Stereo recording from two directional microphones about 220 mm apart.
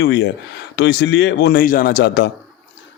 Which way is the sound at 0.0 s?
50° left (ahead or behind).